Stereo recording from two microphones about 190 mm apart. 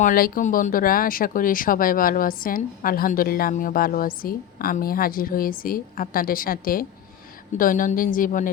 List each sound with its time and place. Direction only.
0.0 s speech: 45° left (ahead or behind)